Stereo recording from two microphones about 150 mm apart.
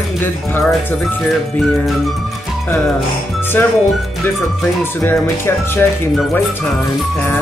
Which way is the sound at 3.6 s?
15° left (ahead or behind).